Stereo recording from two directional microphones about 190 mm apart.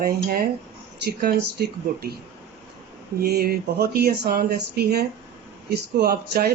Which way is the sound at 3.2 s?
55° right (ahead or behind).